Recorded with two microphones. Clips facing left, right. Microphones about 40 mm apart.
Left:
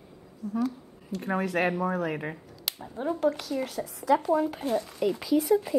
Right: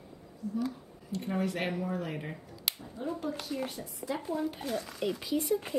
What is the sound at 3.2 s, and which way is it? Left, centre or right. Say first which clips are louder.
A woman's voice: left 8 dB; left.